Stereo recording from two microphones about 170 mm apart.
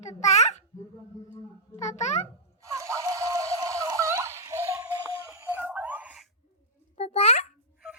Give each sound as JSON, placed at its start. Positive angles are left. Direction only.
{"t": 0.2, "sound": "babbling", "side_deg": 40}
{"t": 1.8, "sound": "a child's voice", "side_deg": 40}
{"t": 2.7, "sound": "a sound", "side_deg": -20}
{"t": 6.9, "sound": "babbling", "side_deg": 35}